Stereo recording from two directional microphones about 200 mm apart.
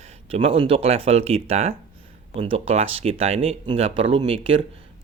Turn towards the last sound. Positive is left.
turn(degrees=-25)  # may be behind; listen again after turning